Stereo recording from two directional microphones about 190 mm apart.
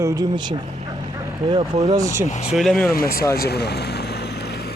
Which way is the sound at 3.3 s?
60° left (ahead or behind).